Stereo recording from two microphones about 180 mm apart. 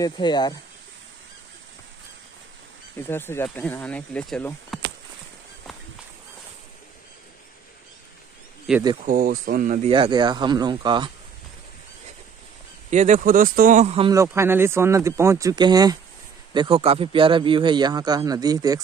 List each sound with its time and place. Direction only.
0.0 s speech: 25° left (ahead or behind)
3.1 s speech: 10° left (ahead or behind)
8.7 s speech: centre (ahead or behind)
9.0 s speech: 50° right (ahead or behind)
9.8 s a man's voice: 30° right (ahead or behind)
12.9 s speech: 40° right (ahead or behind)
14.1 s a man's voice: 15° right (ahead or behind)